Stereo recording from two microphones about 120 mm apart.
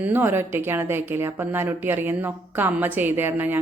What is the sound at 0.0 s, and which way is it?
A woman's voice, 20° right (ahead or behind).